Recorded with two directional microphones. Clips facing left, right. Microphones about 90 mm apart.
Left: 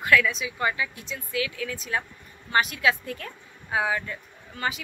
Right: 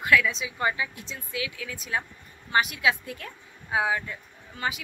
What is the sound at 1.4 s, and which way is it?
Speech, 15° right (ahead or behind).